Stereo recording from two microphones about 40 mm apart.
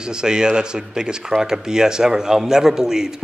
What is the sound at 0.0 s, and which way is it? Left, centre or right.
Speech, centre.